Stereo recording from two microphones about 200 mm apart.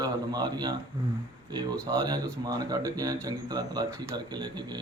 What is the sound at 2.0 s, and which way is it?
A man's voice, 20° right (ahead or behind).